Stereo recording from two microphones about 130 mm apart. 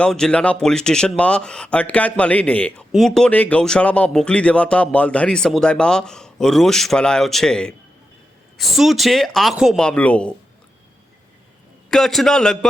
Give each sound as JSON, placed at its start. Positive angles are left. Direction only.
{"t": 0.0, "sound": "speech", "side_deg": 5}
{"t": 11.9, "sound": "speech", "side_deg": 5}